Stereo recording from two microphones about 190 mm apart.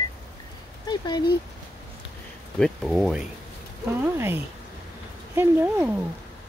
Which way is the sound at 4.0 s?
10° right (ahead or behind).